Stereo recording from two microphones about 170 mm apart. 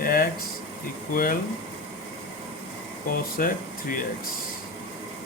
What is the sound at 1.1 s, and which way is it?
Speech, 55° left (ahead or behind).